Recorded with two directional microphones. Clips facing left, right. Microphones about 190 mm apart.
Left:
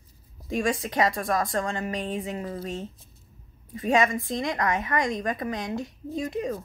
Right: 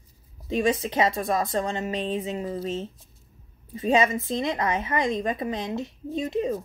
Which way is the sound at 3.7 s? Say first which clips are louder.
Right 1 dB; 25° right (ahead or behind).